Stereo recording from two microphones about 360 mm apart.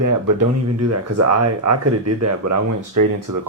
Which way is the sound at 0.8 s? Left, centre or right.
Right.